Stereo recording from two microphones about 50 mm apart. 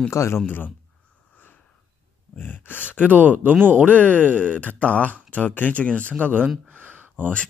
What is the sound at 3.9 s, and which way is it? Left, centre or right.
Speech, left.